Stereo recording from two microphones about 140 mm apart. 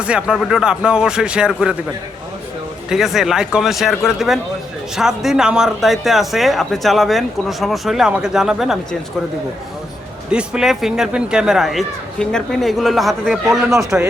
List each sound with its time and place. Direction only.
0.0 s a man's voice: 5° right (ahead or behind)
2.9 s a man's voice: centre (ahead or behind)
10.3 s a man's voice: 5° right (ahead or behind)
13.7 s speech: 15° right (ahead or behind)